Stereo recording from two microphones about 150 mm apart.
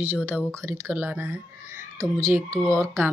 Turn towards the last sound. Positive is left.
turn(degrees=-20)  # may be behind; listen again after turning